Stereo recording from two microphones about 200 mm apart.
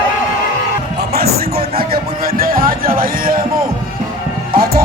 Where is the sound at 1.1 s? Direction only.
50° right (ahead or behind).